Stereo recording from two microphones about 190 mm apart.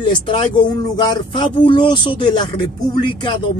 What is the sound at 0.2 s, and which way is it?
Speech, 25° left (ahead or behind).